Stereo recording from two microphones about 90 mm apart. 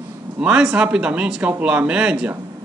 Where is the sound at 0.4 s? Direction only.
5° right (ahead or behind).